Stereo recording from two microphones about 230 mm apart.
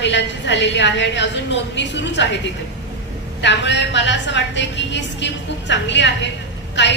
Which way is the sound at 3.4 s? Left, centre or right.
Left.